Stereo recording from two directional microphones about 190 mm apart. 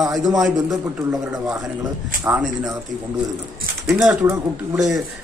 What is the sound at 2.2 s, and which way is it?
Speech, 15° right (ahead or behind).